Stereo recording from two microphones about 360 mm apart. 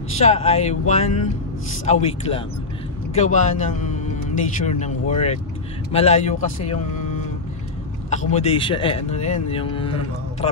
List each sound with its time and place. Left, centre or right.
0.2 s speech: centre
8.1 s speech: centre